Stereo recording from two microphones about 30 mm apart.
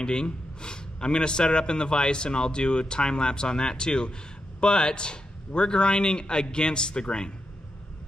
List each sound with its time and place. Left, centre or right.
0.0 s a man's voice: left